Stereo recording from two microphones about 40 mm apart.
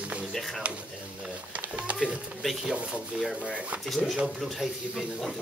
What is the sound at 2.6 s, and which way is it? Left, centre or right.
Speech, right.